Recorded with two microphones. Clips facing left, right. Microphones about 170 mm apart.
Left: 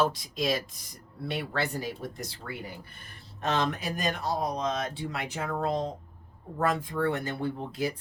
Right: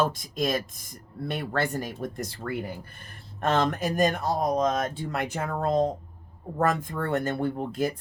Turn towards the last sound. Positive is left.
turn(degrees=-50)  # may be behind; listen again after turning